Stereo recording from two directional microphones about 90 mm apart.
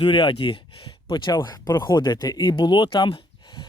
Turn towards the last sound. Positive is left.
turn(degrees=55)  # may be behind; listen again after turning